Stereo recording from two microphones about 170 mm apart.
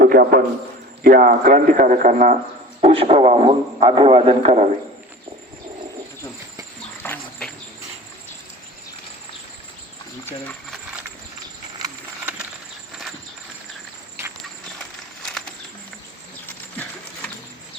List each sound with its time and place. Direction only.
0.0 s a man's voice: 60° right (ahead or behind)
2.8 s a man's voice: 35° right (ahead or behind)
7.0 s a sound: 10° left (ahead or behind)
10.2 s speech: 10° left (ahead or behind)